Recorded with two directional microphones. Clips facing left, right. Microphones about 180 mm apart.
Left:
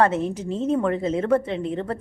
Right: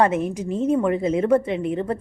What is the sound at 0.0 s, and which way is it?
A woman's voice, 15° right (ahead or behind).